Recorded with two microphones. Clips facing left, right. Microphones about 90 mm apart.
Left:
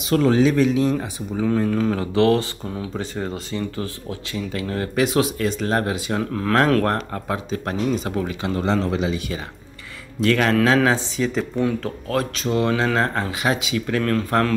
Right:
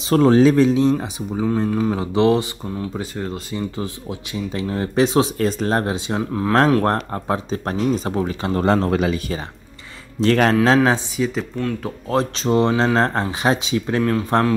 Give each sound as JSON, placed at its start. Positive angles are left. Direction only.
{"t": 0.1, "sound": "speech", "side_deg": -40}
{"t": 0.8, "sound": "speech", "side_deg": -15}
{"t": 2.7, "sound": "speech", "side_deg": 0}
{"t": 3.5, "sound": "speech", "side_deg": -20}
{"t": 6.8, "sound": "speech", "side_deg": -30}
{"t": 10.2, "sound": "speech", "side_deg": -35}
{"t": 11.1, "sound": "speech", "side_deg": -5}
{"t": 12.1, "sound": "speech", "side_deg": -30}